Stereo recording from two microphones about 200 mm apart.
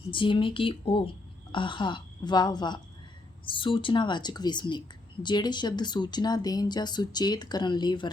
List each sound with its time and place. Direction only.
0.1 s speech: 25° left (ahead or behind)